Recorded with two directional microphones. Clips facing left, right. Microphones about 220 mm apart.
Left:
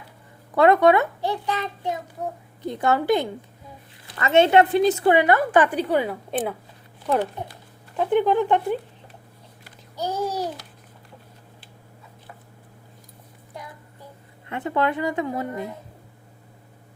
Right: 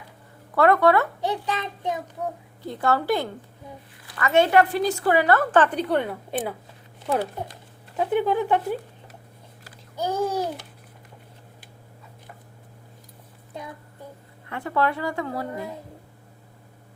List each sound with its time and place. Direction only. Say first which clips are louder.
0.5 s a woman's voice: left 2 dB; 20° left (ahead or behind)
1.3 s child singing: left 1 dB; 20° right (ahead or behind)
2.6 s a woman's voice: left 2 dB; 20° left (ahead or behind)
7.9 s speech: left 3 dB; 5° right (ahead or behind)
9.9 s babbling: right 2 dB; 50° right (ahead or behind)
14.5 s a woman's voice: left 1 dB; 20° left (ahead or behind)